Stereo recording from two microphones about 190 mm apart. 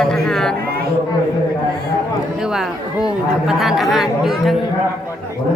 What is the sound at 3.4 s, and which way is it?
Speech, centre (ahead or behind).